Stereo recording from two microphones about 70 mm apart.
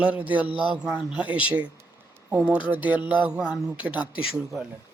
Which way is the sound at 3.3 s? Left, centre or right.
Centre.